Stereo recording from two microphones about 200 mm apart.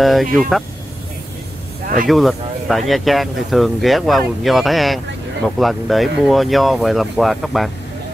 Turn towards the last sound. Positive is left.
turn(degrees=0)  # may be behind; listen again after turning